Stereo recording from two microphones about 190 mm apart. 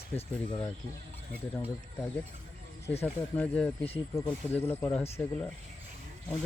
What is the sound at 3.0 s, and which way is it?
Speech, 5° left (ahead or behind).